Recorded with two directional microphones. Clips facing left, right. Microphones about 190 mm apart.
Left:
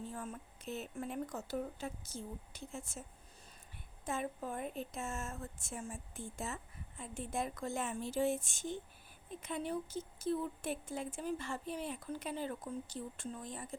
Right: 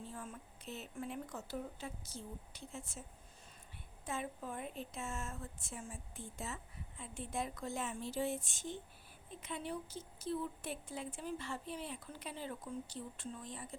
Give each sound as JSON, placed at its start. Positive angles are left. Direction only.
{"t": 0.1, "sound": "a woman's voice", "side_deg": 45}
{"t": 4.0, "sound": "a woman's voice", "side_deg": 45}